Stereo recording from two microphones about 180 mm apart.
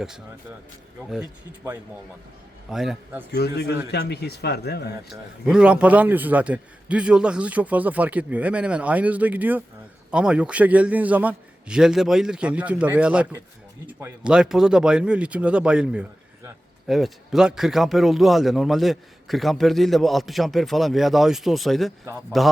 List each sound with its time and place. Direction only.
2.6 s speech: centre (ahead or behind)
3.3 s speech: 60° left (ahead or behind)
5.5 s a man's voice: 5° right (ahead or behind)